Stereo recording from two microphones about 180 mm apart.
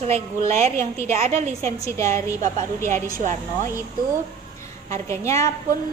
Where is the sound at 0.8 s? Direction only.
40° right (ahead or behind).